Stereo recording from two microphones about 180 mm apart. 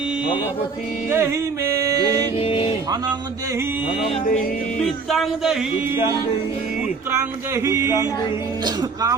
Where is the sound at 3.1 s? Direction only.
10° right (ahead or behind).